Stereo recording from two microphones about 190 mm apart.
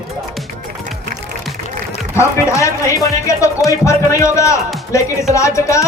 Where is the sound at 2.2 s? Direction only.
15° left (ahead or behind).